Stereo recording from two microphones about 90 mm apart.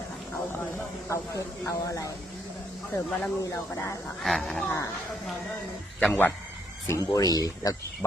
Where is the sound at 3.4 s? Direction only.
35° left (ahead or behind).